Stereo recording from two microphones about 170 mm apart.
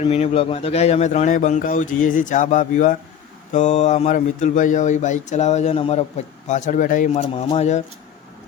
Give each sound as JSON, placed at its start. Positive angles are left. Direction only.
{"t": 0.0, "sound": "speech", "side_deg": 40}